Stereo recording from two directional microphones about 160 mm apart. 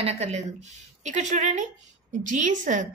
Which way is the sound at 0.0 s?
45° right (ahead or behind).